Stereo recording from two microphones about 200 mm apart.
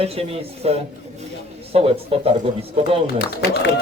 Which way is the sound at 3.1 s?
50° left (ahead or behind).